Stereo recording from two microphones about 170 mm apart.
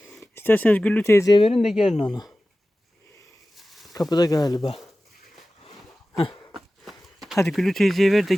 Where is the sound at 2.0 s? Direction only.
25° left (ahead or behind).